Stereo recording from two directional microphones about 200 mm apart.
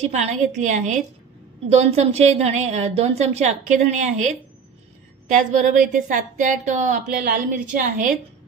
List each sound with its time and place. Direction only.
0.0 s a woman's voice: 35° right (ahead or behind)